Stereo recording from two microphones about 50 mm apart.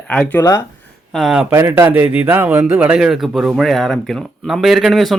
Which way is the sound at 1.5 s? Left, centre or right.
Right.